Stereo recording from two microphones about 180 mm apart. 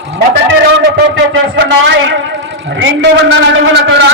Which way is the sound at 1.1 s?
80° right.